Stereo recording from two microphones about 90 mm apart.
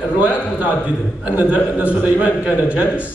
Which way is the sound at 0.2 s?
15° right (ahead or behind).